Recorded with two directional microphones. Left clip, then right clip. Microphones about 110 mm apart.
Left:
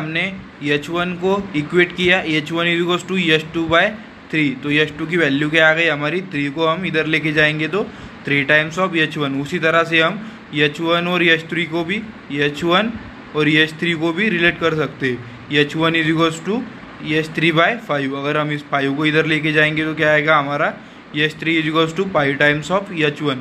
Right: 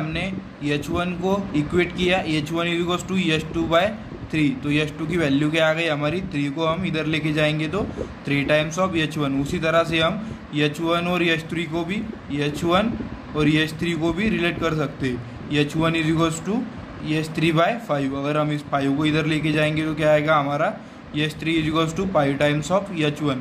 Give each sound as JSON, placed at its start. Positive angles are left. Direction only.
{"t": 0.1, "sound": "a man's voice", "side_deg": 5}